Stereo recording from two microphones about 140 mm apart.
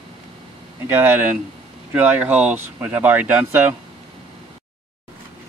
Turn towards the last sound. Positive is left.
turn(degrees=-10)  # may be behind; listen again after turning